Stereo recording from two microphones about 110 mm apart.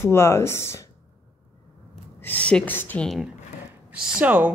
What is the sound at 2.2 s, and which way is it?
Speech, 15° left (ahead or behind).